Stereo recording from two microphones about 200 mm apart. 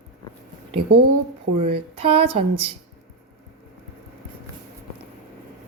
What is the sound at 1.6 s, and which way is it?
Speech, 30° right (ahead or behind).